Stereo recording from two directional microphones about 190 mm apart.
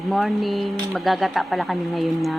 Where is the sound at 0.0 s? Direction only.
Centre (ahead or behind).